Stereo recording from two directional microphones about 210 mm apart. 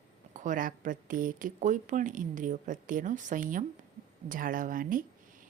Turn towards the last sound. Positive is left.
turn(degrees=-40)  # may be behind; listen again after turning